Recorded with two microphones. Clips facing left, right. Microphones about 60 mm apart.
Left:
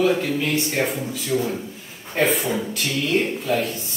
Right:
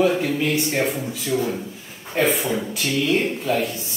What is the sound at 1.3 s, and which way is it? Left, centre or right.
Speech, centre.